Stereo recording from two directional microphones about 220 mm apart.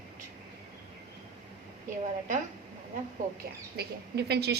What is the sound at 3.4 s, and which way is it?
Speech, 45° right (ahead or behind).